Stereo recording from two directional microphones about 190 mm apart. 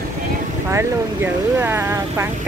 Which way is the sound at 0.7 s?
15° right (ahead or behind).